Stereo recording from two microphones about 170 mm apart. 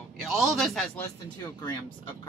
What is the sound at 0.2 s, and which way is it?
Speech, centre (ahead or behind).